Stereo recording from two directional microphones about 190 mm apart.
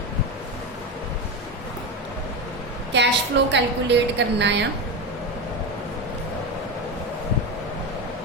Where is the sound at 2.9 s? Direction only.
70° right (ahead or behind).